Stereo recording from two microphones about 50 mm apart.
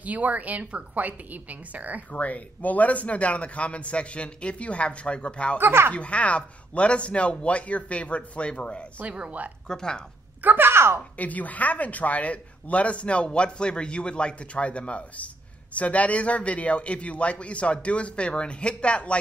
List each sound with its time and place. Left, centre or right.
0.0 s a woman's voice: right
2.0 s speech: left
5.6 s speech: right
5.9 s speech: left
9.7 s speech: centre
10.4 s a woman's voice: right
11.1 s speech: left